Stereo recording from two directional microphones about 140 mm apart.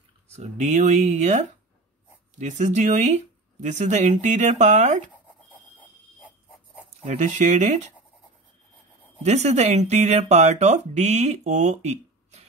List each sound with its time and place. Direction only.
0.4 s speech: 55° right (ahead or behind)
7.1 s speech: 60° right (ahead or behind)
9.2 s speech: 50° right (ahead or behind)